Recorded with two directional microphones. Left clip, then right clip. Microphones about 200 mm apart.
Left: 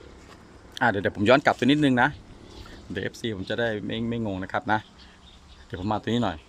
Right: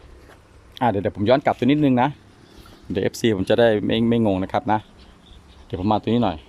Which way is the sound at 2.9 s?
25° right (ahead or behind).